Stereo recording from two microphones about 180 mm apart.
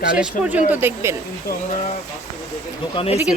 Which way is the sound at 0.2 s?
10° right (ahead or behind).